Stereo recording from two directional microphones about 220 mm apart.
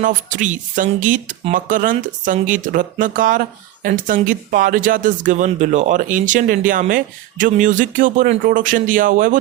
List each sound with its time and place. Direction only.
0.0 s speech: 35° right (ahead or behind)